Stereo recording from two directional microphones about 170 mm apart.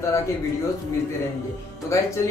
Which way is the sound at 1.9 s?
15° left (ahead or behind).